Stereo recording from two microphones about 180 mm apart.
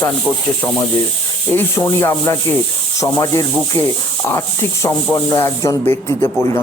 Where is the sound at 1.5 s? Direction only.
15° left (ahead or behind).